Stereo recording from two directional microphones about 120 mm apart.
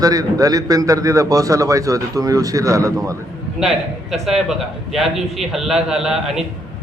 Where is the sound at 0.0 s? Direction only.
30° right (ahead or behind).